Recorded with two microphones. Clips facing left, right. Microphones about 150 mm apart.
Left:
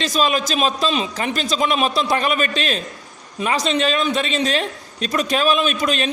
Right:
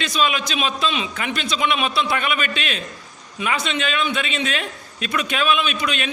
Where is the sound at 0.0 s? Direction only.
40° left (ahead or behind).